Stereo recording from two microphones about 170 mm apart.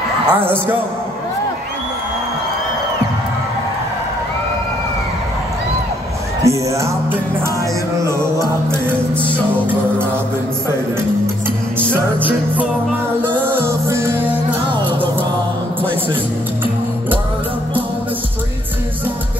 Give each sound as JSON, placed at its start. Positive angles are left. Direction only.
{"t": 0.3, "sound": "music", "side_deg": -10}
{"t": 6.4, "sound": "music", "side_deg": -15}
{"t": 11.9, "sound": "music", "side_deg": -10}